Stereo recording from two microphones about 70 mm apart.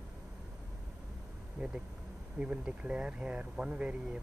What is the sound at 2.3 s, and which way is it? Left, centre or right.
Speech, centre.